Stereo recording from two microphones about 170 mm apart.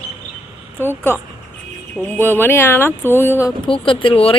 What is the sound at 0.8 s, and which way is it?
Speech, 10° left (ahead or behind).